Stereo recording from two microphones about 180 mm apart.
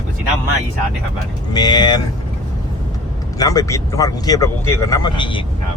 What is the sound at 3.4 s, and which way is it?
Speech, 20° left (ahead or behind).